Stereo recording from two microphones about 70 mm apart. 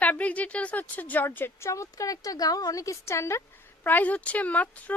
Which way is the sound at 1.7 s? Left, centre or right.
Left.